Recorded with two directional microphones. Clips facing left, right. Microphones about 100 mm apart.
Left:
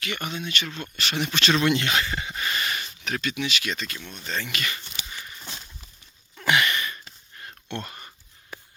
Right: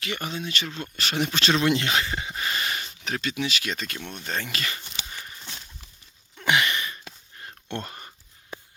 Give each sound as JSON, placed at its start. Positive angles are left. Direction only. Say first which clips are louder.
{"t": 0.0, "sound": "speech", "louder": "even", "side_deg": -30}
{"t": 4.1, "sound": "speech", "louder": "even", "side_deg": -50}
{"t": 4.5, "sound": "speech", "louder": "left 1 dB", "side_deg": -30}
{"t": 6.4, "sound": "a sound", "louder": "left 1 dB", "side_deg": -25}